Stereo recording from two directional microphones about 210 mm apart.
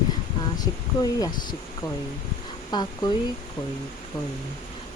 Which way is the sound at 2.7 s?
20° left (ahead or behind).